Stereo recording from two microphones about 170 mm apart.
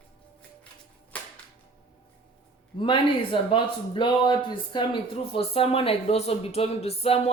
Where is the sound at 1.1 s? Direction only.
10° left (ahead or behind).